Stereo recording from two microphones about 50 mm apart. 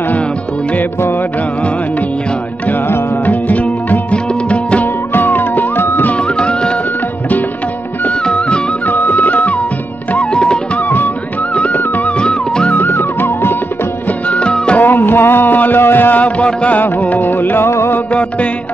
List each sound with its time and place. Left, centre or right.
2.7 s music: left
5.1 s music: left
6.1 s music: left
8.1 s music: left
8.8 s music: left
10.1 s music: centre
10.8 s music: left
11.5 s music: left
11.8 s music: left
12.2 s music: centre
12.7 s music: left
14.3 s music: left
14.8 s music: left
17.6 s music: left